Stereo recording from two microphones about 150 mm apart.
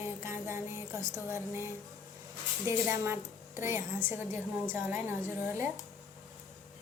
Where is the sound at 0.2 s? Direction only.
20° right (ahead or behind).